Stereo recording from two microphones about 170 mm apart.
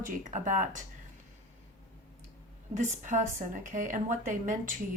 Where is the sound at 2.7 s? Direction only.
50° right (ahead or behind).